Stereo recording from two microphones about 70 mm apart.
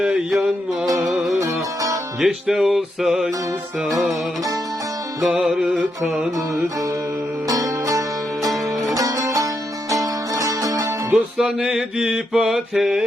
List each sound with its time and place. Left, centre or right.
0.0 s music: centre
2.2 s music: centre
5.2 s music: centre
6.3 s music: right
11.1 s music: centre